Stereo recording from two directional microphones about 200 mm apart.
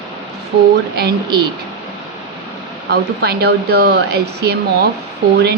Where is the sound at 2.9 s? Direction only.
50° right (ahead or behind).